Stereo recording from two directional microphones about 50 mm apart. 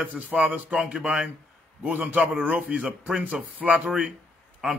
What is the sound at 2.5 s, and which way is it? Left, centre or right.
Speech, right.